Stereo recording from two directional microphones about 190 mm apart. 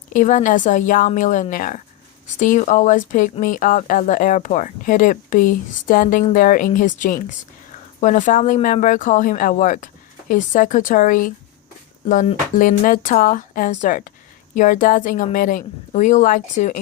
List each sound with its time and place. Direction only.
0.1 s speech: 40° left (ahead or behind)